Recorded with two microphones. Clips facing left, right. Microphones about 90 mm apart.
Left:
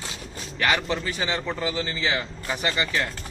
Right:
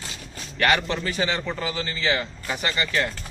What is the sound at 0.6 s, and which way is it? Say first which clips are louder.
A man's voice: right 2 dB; 5° left (ahead or behind).